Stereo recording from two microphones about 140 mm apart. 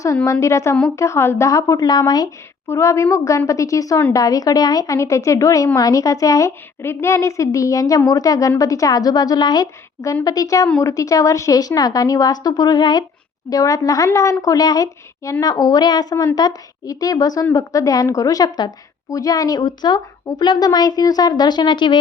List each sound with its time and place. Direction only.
0.3 s a woman's voice: 20° left (ahead or behind)